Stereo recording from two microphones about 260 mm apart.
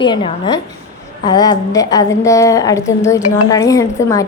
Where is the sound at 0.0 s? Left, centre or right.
Centre.